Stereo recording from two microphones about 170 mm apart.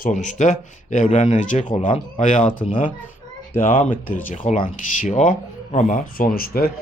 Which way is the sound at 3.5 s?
55° left (ahead or behind).